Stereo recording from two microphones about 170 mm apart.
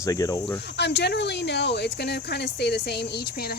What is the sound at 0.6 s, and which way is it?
Speech, 90° left.